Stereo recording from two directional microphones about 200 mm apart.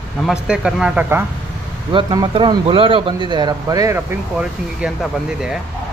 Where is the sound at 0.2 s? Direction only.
5° right (ahead or behind).